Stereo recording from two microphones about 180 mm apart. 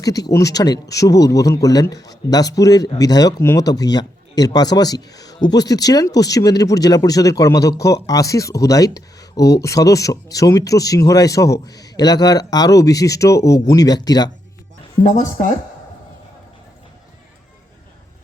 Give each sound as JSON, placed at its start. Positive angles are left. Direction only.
{"t": 0.0, "sound": "a man's voice", "side_deg": 20}
{"t": 15.0, "sound": "speech", "side_deg": 45}